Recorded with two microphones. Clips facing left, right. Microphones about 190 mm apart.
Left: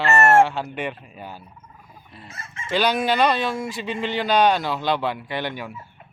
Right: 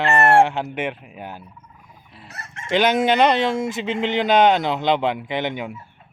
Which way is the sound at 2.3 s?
70° right (ahead or behind).